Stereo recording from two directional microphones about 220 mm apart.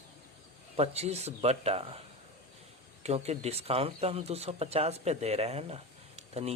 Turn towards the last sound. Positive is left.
turn(degrees=-30)  # may be behind; listen again after turning